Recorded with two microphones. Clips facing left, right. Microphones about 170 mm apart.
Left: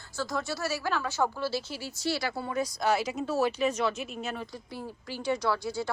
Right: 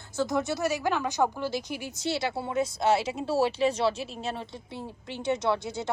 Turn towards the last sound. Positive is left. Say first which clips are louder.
# right 1 dB
turn(degrees=-20)  # may be behind; listen again after turning